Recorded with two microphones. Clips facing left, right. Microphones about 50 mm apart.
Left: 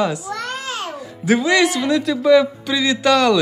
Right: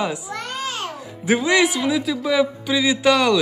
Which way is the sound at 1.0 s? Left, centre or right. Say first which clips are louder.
Left 2 dB; centre.